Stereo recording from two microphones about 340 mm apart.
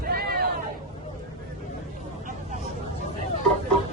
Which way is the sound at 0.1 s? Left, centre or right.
Right.